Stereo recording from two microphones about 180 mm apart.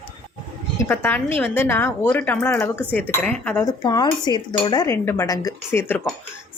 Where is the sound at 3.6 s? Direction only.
20° left (ahead or behind).